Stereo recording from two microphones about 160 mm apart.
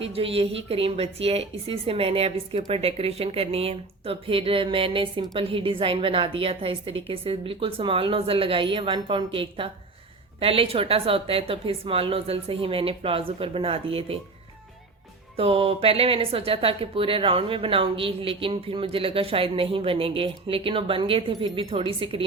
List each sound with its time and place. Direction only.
0.0 s a woman's voice: 35° right (ahead or behind)
15.4 s a woman's voice: 35° right (ahead or behind)